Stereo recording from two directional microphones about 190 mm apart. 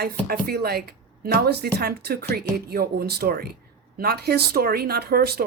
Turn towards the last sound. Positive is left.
turn(degrees=-55)  # may be behind; listen again after turning